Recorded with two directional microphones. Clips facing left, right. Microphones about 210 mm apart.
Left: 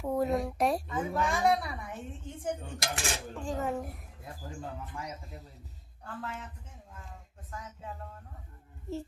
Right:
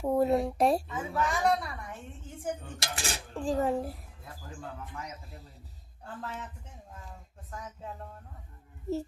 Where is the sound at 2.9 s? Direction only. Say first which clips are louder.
Right 1 dB; 35° right (ahead or behind).